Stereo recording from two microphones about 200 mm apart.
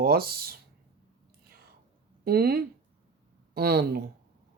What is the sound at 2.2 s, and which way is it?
Speech, 50° right (ahead or behind).